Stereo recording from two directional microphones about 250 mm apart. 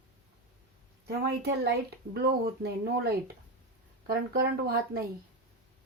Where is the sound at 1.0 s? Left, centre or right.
Right.